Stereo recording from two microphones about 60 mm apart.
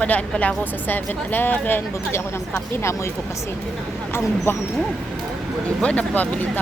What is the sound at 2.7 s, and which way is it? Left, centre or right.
Speech, left.